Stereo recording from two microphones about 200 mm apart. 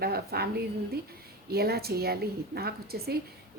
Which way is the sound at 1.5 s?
50° right (ahead or behind).